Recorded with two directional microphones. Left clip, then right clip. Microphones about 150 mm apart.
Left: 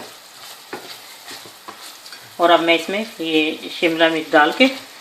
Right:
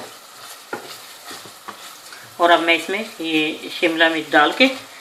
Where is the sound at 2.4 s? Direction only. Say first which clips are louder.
Left 1 dB; 55° left (ahead or behind).